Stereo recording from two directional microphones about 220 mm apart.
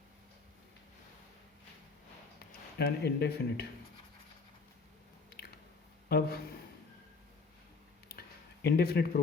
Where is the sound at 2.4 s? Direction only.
45° left (ahead or behind).